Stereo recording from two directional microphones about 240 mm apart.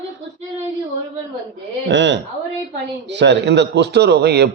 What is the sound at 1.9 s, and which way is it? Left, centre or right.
A man's voice, right.